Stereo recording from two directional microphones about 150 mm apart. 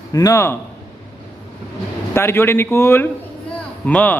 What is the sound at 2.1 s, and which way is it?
Speech, 15° left (ahead or behind).